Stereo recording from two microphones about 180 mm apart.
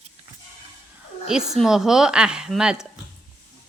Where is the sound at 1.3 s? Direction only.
Centre (ahead or behind).